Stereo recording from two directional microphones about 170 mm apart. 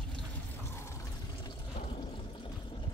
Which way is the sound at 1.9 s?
30° left (ahead or behind).